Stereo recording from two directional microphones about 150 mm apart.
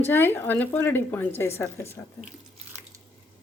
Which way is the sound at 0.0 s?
15° left (ahead or behind).